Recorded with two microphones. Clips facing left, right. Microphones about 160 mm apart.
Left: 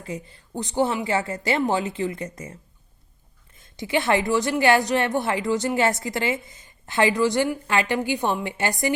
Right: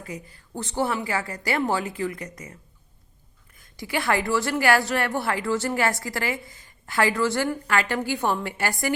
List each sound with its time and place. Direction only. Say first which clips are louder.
0.0 s a woman's voice: left 3 dB; 25° left (ahead or behind)